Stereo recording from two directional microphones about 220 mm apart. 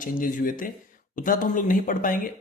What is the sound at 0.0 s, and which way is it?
A man's voice, 40° left (ahead or behind).